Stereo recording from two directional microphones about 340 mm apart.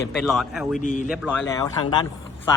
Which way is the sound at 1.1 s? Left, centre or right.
Centre.